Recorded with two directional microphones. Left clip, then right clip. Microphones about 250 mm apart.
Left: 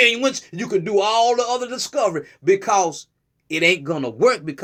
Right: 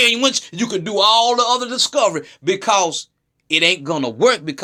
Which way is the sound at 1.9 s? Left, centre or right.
Centre.